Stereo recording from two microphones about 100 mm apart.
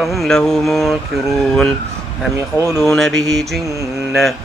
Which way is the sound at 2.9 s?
Centre (ahead or behind).